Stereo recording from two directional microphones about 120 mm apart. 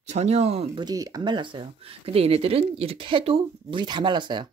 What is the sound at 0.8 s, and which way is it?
Speech, 30° right (ahead or behind).